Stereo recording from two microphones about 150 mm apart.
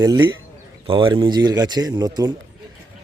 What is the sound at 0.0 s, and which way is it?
Speech, 25° right (ahead or behind).